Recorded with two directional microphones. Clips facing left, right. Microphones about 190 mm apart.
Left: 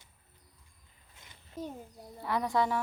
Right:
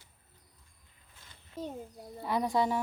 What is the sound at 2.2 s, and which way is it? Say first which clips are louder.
Speech: right 1 dB; 15° right (ahead or behind).